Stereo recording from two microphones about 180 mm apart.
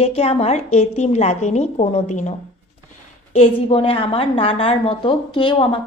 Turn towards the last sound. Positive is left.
turn(degrees=30)  # may be behind; listen again after turning